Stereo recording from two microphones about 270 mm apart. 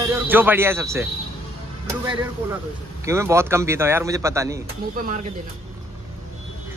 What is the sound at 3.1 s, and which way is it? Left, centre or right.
Speech, centre.